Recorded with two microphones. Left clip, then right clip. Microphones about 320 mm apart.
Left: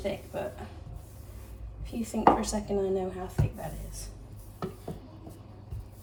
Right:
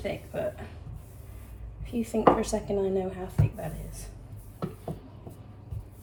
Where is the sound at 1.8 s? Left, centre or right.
Centre.